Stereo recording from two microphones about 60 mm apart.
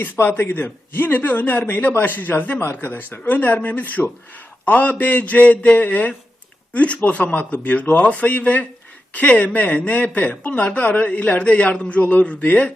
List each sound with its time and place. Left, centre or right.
0.0 s a man's voice: left